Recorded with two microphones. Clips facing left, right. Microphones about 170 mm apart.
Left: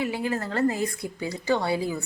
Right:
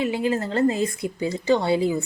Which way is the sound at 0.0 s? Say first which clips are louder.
Right 4 dB; 20° right (ahead or behind).